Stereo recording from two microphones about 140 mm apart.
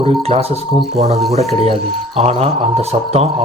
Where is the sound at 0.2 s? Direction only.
45° right (ahead or behind).